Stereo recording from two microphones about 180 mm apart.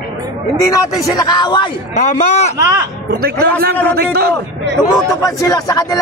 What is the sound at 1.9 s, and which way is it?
Speech, 40° left (ahead or behind).